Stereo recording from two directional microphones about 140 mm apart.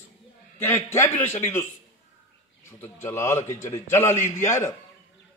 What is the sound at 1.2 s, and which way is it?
A man's voice, 15° left (ahead or behind).